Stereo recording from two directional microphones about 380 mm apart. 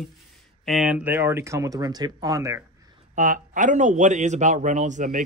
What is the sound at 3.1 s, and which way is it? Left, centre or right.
Speech, centre.